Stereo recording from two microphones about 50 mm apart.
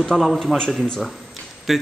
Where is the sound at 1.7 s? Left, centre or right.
Centre.